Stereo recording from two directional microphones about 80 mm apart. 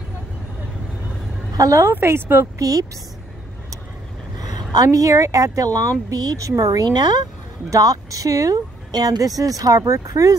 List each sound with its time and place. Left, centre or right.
1.5 s a woman's voice: right
1.9 s speech: right
2.6 s speech: right
4.4 s speech: right
7.7 s speech: right